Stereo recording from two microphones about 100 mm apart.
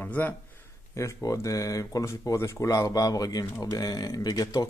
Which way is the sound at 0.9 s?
30° left (ahead or behind).